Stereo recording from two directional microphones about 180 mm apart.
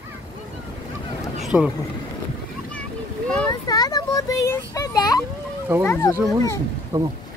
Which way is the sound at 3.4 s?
20° left (ahead or behind).